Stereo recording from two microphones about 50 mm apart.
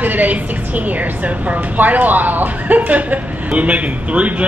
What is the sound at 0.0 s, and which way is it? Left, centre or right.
A woman's voice, right.